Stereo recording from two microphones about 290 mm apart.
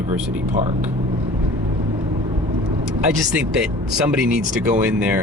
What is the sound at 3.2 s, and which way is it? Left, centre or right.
Speech, centre.